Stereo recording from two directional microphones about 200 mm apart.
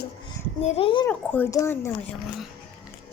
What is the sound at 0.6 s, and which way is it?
Female singing, 25° left (ahead or behind).